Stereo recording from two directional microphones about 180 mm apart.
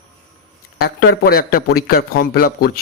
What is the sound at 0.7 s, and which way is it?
A man's voice, 60° left (ahead or behind).